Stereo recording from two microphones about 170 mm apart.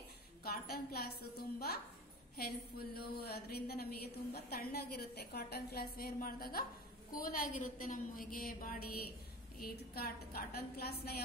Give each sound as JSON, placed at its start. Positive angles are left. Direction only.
{"t": 0.4, "sound": "a woman's voice", "side_deg": 65}
{"t": 2.3, "sound": "a woman's voice", "side_deg": 65}